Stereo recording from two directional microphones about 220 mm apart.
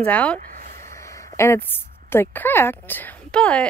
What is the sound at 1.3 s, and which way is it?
A woman's voice, 10° left (ahead or behind).